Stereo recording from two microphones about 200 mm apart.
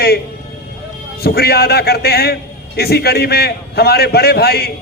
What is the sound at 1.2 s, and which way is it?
A man's voice, 50° left (ahead or behind).